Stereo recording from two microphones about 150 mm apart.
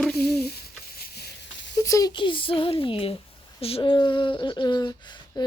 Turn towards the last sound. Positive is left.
turn(degrees=30)  # may be behind; listen again after turning